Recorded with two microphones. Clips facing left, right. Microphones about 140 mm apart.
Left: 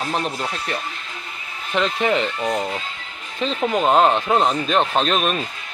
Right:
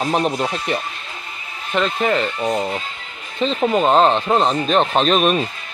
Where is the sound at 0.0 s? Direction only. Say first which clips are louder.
Right 5 dB; 20° right (ahead or behind); by 2.2 s 5° right (ahead or behind).